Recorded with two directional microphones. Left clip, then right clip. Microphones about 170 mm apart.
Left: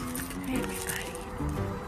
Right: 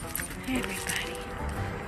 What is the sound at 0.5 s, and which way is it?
Music, 15° right (ahead or behind).